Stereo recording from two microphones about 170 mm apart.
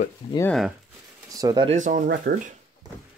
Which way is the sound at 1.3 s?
25° right (ahead or behind).